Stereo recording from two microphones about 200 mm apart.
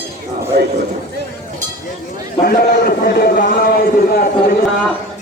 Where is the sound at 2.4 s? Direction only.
50° left (ahead or behind).